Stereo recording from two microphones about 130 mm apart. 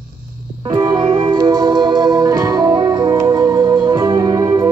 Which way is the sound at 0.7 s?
25° right (ahead or behind).